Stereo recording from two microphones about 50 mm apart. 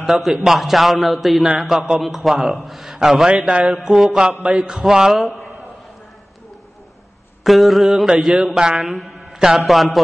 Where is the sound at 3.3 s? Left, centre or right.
Right; by 5.3 s centre.